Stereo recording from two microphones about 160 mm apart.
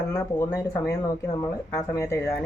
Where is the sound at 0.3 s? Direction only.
20° left (ahead or behind).